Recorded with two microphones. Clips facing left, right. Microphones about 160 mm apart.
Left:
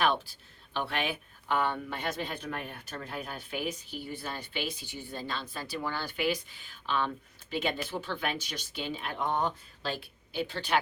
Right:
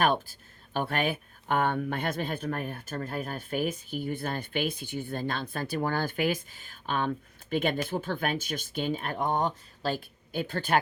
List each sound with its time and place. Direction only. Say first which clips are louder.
0.0 s speech: right 3 dB; 45° right (ahead or behind)